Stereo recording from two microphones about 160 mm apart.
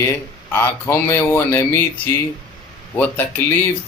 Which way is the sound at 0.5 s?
15° left (ahead or behind).